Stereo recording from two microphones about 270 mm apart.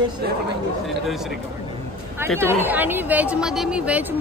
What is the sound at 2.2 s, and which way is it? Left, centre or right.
A woman's voice, centre.